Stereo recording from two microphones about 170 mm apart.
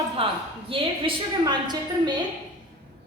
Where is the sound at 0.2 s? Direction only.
35° right (ahead or behind).